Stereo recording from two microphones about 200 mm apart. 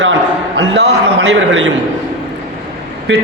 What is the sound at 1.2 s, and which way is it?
Speech, 65° right (ahead or behind).